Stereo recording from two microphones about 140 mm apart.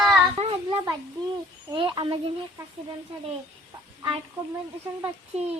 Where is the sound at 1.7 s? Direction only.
35° right (ahead or behind).